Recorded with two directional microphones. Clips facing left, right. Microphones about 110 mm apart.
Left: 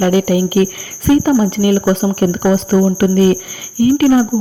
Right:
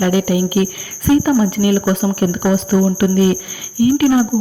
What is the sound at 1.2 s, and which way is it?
Speech, 30° left (ahead or behind).